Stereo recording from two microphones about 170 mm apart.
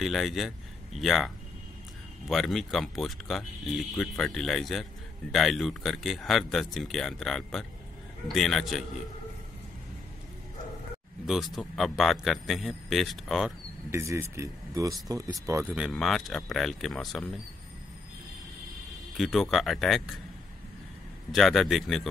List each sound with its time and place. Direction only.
0.0 s a man's voice: centre (ahead or behind)
11.2 s speech: centre (ahead or behind)
13.8 s speech: 15° right (ahead or behind)
15.6 s speech: 5° right (ahead or behind)
19.1 s speech: centre (ahead or behind)
21.3 s speech: centre (ahead or behind)